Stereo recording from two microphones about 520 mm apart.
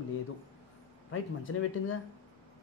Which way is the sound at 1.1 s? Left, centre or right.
Left.